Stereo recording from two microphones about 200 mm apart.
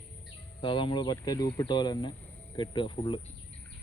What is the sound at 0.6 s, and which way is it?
Speech, 25° left (ahead or behind).